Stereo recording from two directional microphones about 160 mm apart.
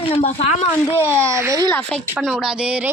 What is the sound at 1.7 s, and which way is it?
A woman's voice, 5° left (ahead or behind).